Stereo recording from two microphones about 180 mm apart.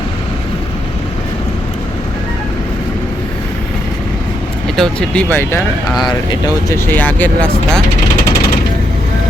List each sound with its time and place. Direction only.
4.8 s speech: 5° left (ahead or behind)
6.7 s speech: 15° left (ahead or behind)